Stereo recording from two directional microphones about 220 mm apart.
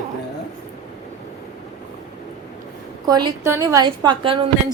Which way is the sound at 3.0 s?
15° right (ahead or behind).